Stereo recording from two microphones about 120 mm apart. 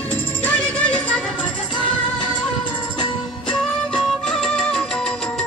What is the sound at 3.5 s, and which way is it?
Music, 5° left (ahead or behind).